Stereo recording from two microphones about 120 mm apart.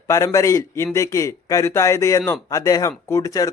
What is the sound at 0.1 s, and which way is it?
Speech, 25° left (ahead or behind).